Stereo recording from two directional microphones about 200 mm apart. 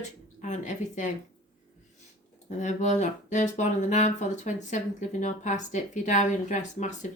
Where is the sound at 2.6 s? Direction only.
35° left (ahead or behind).